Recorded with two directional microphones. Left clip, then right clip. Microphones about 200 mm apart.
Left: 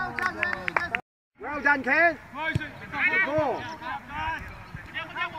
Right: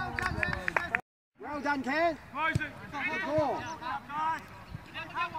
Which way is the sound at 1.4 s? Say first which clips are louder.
Left 8 dB; 60° right (ahead or behind).